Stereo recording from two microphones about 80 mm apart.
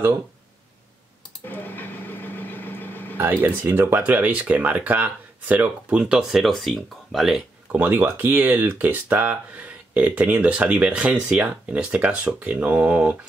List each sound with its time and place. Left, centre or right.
1.4 s a sound: left
3.2 s speech: right
6.4 s speech: centre
7.7 s speech: right